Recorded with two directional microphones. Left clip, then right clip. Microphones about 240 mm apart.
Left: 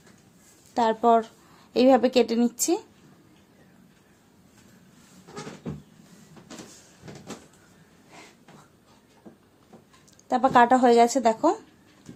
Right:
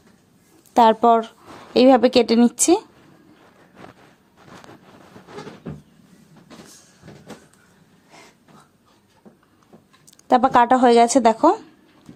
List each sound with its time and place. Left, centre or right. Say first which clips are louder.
0.7 s a woman's voice: right 7 dB; right
10.2 s a woman's voice: right 4 dB; right